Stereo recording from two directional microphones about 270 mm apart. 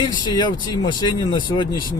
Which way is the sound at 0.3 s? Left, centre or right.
Centre.